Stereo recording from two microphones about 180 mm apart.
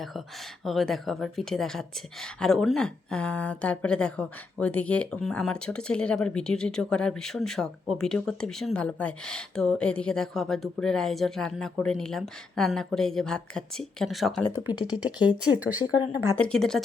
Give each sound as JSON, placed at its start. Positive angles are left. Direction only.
{"t": 0.6, "sound": "speech", "side_deg": 0}
{"t": 14.7, "sound": "speech", "side_deg": 25}
{"t": 15.2, "sound": "speech", "side_deg": -5}
{"t": 16.4, "sound": "speech", "side_deg": 5}